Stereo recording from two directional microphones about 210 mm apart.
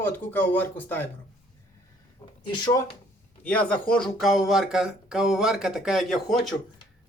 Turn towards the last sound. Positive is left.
turn(degrees=0)  # may be behind; listen again after turning